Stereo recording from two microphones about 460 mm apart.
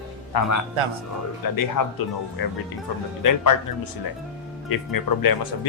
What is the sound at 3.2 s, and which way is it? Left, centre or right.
Speech, left.